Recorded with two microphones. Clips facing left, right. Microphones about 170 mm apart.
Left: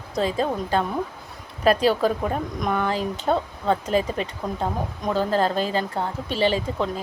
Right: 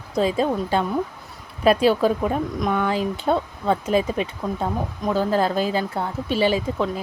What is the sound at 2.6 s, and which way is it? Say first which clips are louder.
A woman's voice: right 1 dB; centre (ahead or behind).